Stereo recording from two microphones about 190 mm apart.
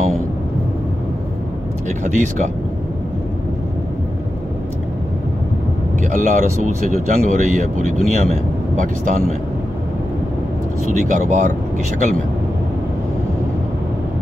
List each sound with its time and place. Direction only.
2.0 s speech: 40° right (ahead or behind)
6.0 s speech: 45° right (ahead or behind)
10.9 s speech: 40° right (ahead or behind)